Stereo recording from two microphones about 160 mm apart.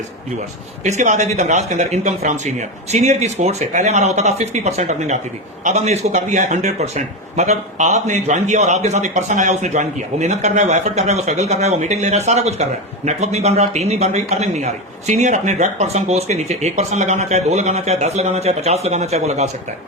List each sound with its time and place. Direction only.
0.9 s a man's voice: 45° right (ahead or behind)